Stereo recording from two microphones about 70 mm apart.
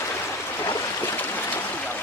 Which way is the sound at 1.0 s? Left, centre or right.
Left.